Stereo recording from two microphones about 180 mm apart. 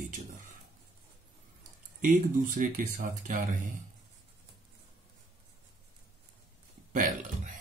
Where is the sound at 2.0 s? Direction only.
45° right (ahead or behind).